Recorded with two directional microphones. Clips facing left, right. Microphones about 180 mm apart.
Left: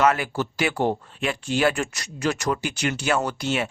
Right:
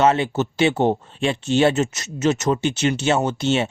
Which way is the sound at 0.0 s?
25° right (ahead or behind).